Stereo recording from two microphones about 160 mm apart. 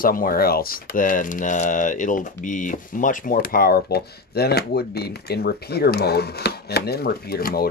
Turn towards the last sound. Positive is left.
turn(degrees=70)  # may be behind; listen again after turning